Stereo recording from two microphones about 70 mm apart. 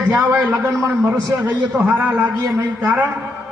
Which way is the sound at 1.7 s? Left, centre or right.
Centre.